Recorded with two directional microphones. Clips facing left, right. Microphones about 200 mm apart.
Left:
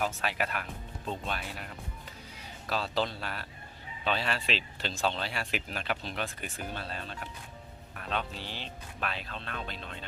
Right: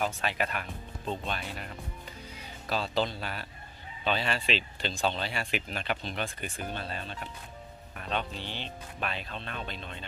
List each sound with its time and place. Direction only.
0.0 s speech: 5° left (ahead or behind)